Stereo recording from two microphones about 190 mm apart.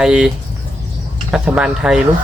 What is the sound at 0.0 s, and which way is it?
Speech, 5° right (ahead or behind).